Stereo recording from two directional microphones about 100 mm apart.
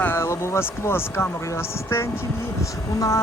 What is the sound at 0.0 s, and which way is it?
Speech, 25° left (ahead or behind).